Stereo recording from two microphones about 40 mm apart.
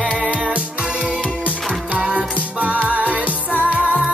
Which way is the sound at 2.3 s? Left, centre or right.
Right.